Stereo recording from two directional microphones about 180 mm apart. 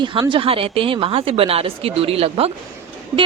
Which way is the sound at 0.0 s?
25° right (ahead or behind).